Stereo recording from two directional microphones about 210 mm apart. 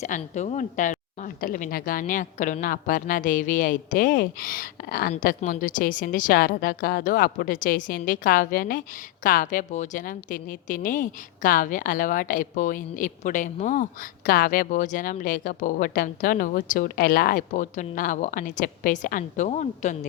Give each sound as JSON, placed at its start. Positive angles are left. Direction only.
{"t": 0.0, "sound": "a woman's voice", "side_deg": 35}